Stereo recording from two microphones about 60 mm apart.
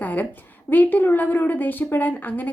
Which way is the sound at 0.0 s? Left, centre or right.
Left.